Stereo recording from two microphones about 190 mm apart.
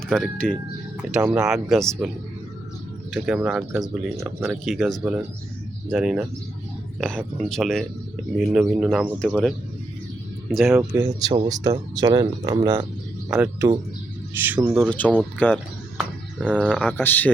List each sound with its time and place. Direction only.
0.1 s speech: 5° left (ahead or behind)
1.1 s speech: 5° right (ahead or behind)
3.1 s speech: 5° right (ahead or behind)
10.8 s speech: 15° right (ahead or behind)
13.3 s speech: 10° right (ahead or behind)
14.8 s speech: 5° left (ahead or behind)